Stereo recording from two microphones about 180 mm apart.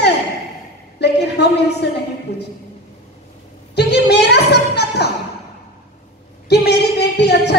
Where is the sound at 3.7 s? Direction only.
65° left (ahead or behind).